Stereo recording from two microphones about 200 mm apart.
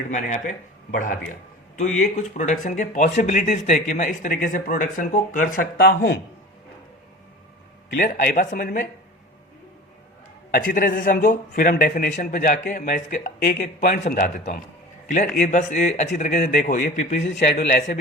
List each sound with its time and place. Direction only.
0.1 s speech: 40° left (ahead or behind)
7.9 s speech: 45° left (ahead or behind)
10.5 s speech: 45° left (ahead or behind)